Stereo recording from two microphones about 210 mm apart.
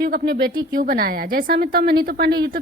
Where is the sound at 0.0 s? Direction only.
45° right (ahead or behind).